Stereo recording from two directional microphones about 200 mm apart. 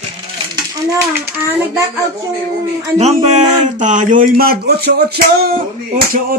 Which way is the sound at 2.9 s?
35° right (ahead or behind).